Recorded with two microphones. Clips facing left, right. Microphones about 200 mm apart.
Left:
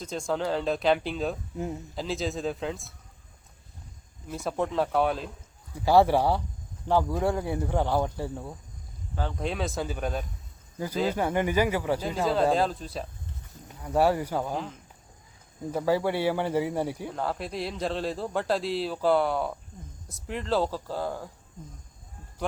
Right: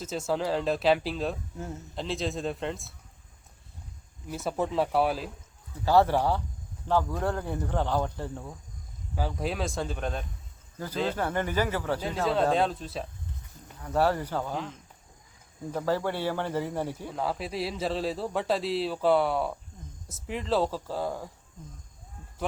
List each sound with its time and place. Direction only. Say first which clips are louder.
0.0 s a man's voice: even; 5° right (ahead or behind)
1.5 s speech: left 5 dB; 15° left (ahead or behind)
2.0 s a man's voice: even; centre (ahead or behind)
4.3 s a man's voice: even; centre (ahead or behind)
5.8 s speech: left 2 dB; 15° left (ahead or behind)
9.1 s a man's voice: even; 5° right (ahead or behind); by 12.0 s 10° left (ahead or behind)
12.0 s a man's voice: even; centre (ahead or behind)
13.7 s speech: left 2 dB; 10° left (ahead or behind)
17.1 s a man's voice: even; centre (ahead or behind)